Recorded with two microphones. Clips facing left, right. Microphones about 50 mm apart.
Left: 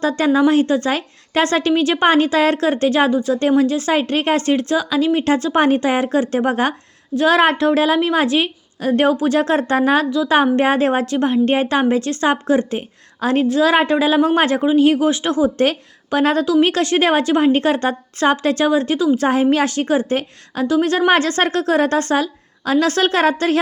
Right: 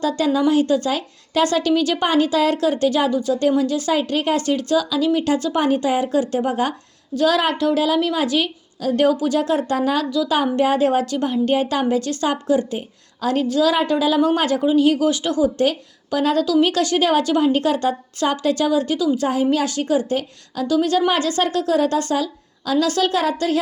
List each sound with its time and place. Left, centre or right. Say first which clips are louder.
0.0 s a woman's voice: left 3 dB; left
21.1 s a woman's voice: left 4 dB; left